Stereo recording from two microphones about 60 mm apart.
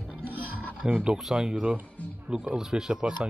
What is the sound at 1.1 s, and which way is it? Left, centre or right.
Speech, centre.